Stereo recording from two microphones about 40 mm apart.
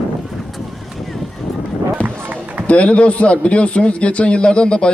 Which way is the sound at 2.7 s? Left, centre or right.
Left.